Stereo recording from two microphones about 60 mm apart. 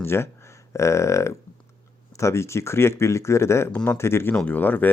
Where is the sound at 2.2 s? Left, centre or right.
Left.